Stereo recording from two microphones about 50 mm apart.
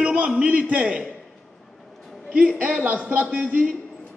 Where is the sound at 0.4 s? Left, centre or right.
Right.